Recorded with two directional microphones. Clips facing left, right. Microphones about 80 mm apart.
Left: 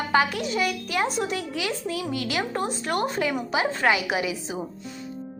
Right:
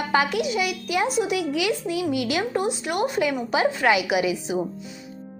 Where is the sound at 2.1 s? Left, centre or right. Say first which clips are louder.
Right 4 dB; right.